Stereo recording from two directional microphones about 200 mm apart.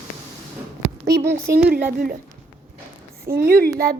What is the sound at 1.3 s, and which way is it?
Speech, 15° right (ahead or behind).